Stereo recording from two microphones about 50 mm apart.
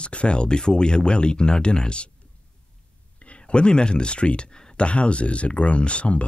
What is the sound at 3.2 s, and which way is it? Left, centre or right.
Speech, left.